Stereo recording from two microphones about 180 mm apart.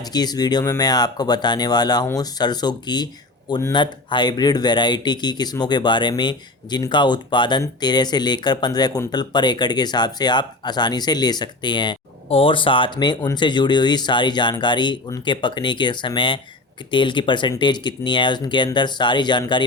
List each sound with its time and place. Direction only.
0.1 s speech: 20° left (ahead or behind)